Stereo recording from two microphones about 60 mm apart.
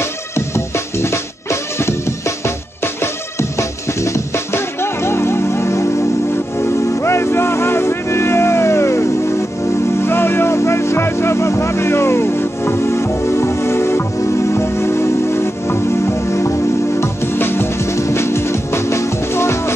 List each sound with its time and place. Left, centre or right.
0.7 s music: left